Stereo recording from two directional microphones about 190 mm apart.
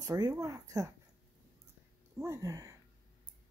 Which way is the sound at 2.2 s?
15° right (ahead or behind).